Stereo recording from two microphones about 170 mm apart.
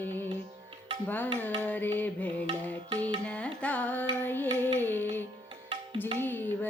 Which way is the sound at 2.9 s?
30° right (ahead or behind).